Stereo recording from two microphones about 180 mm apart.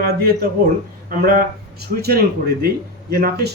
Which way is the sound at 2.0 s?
60° right (ahead or behind).